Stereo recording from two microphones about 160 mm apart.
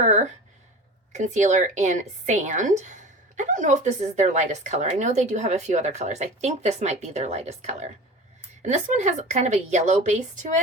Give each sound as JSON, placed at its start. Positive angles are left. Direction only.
{"t": 0.0, "sound": "a woman's voice", "side_deg": -50}